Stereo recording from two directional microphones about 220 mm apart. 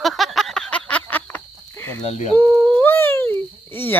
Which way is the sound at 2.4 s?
10° left (ahead or behind).